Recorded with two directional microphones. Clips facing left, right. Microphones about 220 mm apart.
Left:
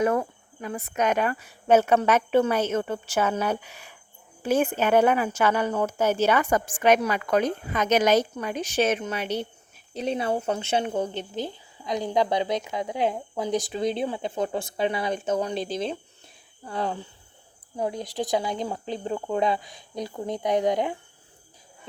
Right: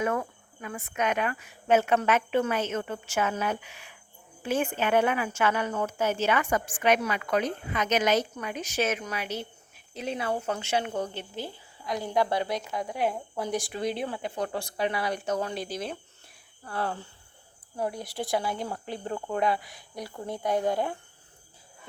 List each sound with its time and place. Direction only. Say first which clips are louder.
0.0 s a woman's voice: left 5 dB; 35° left (ahead or behind); by 20.9 s 15° left (ahead or behind)